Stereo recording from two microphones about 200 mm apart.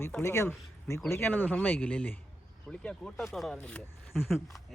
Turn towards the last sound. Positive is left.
turn(degrees=0)  # may be behind; listen again after turning